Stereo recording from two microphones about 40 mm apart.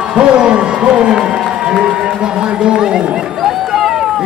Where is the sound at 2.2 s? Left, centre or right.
Right.